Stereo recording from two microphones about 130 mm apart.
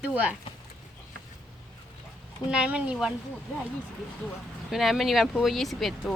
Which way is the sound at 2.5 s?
10° right (ahead or behind).